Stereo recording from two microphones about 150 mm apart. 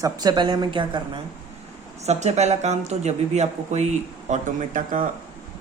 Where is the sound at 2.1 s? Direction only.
50° right (ahead or behind).